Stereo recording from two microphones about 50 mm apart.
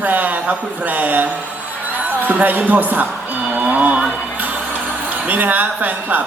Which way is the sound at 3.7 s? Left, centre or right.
Right.